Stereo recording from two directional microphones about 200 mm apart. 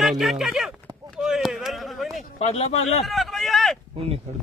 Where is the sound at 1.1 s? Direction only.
Centre (ahead or behind).